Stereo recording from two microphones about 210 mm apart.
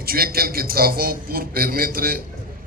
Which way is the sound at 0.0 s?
45° right (ahead or behind).